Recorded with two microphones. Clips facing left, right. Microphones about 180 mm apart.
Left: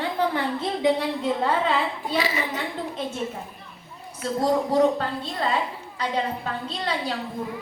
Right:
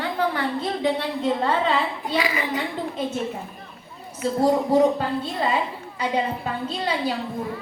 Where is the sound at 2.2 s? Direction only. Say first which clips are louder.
Even; 25° left (ahead or behind).